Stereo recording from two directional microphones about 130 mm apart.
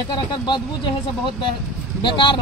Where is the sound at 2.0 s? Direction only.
40° left (ahead or behind).